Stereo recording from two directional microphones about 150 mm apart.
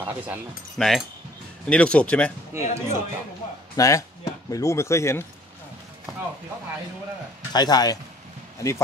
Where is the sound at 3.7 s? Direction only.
20° left (ahead or behind).